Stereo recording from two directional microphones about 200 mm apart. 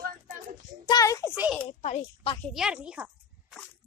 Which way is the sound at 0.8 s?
15° left (ahead or behind).